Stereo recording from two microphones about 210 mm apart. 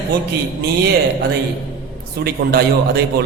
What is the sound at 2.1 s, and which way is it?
Speech, 50° right (ahead or behind).